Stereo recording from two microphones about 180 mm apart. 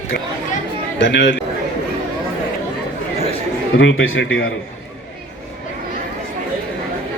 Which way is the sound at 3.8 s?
90° left.